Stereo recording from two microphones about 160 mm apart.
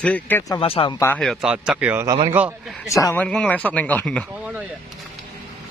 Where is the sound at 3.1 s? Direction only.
10° left (ahead or behind).